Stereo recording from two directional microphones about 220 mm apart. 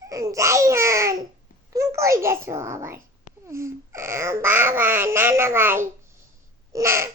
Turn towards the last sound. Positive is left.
turn(degrees=-10)  # may be behind; listen again after turning